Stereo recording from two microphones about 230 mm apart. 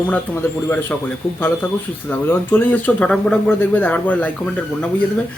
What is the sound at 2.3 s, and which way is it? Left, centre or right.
Speech, centre.